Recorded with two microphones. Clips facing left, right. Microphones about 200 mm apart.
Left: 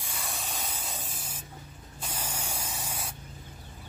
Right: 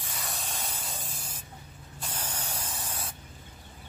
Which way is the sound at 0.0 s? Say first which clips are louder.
Even; 10° left (ahead or behind).